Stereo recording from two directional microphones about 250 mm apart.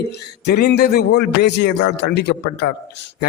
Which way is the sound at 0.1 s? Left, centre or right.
Left.